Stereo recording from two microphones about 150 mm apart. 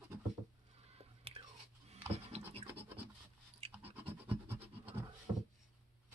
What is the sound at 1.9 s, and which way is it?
Scratch, 45° right (ahead or behind).